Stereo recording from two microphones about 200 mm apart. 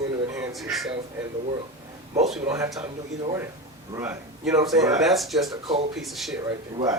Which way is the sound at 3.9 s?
10° right (ahead or behind).